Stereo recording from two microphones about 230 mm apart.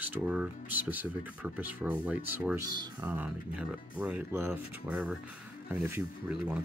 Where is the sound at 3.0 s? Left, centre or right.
Centre.